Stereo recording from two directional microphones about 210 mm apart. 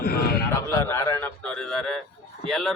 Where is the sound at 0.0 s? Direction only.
45° left (ahead or behind).